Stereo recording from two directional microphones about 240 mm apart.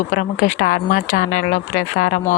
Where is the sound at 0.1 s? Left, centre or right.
Left.